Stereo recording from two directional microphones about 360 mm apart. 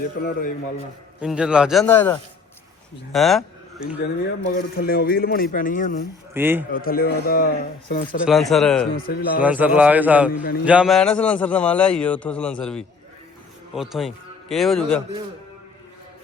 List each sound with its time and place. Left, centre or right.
0.2 s speech: left
1.2 s a man's voice: centre
4.4 s speech: left
6.3 s a man's voice: centre
6.7 s speech: left
8.2 s a man's voice: centre
9.0 s speech: left
9.4 s a man's voice: centre